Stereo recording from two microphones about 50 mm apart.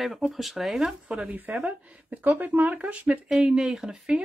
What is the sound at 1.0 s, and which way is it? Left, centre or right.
Speech, right.